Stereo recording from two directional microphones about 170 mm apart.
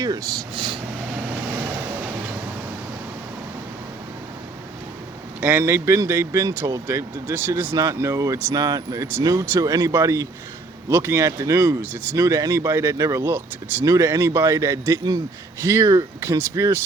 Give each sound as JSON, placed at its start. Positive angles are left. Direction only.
{"t": 0.0, "sound": "speech", "side_deg": -20}
{"t": 5.4, "sound": "speech", "side_deg": -10}